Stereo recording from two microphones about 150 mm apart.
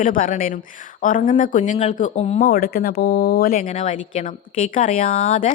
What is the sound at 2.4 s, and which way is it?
Speech, 85° left.